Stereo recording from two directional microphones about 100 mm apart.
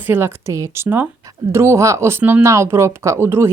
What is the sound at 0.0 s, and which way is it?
Speech, 20° right (ahead or behind).